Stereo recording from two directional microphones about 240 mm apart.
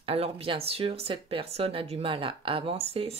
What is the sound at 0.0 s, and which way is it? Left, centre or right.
Speech, right.